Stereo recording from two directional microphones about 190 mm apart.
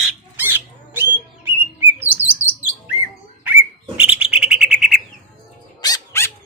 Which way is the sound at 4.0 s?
5° right (ahead or behind).